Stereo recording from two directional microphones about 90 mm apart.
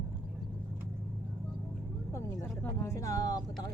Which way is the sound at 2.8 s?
35° left (ahead or behind).